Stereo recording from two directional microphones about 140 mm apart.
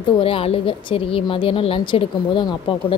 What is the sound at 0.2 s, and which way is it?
A woman's voice, 40° left (ahead or behind).